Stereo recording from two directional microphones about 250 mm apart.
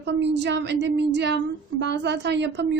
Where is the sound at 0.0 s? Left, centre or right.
Right.